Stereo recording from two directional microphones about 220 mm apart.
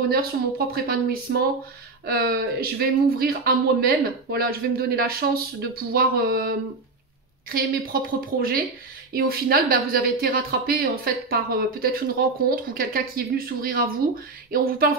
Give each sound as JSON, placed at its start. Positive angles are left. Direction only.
{"t": 0.1, "sound": "speech", "side_deg": -45}